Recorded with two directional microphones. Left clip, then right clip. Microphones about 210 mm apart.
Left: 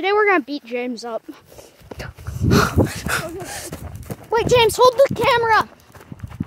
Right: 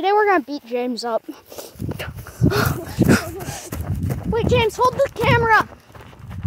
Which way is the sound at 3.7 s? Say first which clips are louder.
Right 4 dB; 45° right (ahead or behind).